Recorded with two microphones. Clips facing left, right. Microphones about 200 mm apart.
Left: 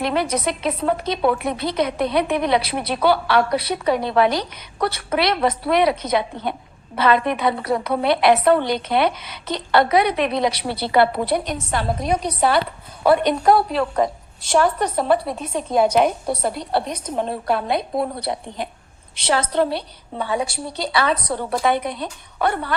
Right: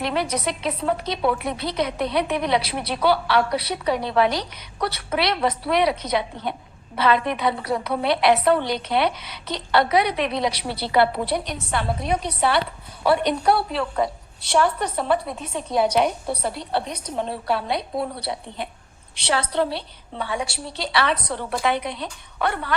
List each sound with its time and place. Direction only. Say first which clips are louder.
0.0 s a woman's voice: left 3 dB; 50° left (ahead or behind); by 22.7 s 35° left (ahead or behind)